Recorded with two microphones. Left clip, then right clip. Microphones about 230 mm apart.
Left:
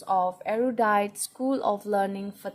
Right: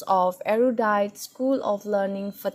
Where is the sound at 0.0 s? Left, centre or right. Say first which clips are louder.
Right 4 dB; right.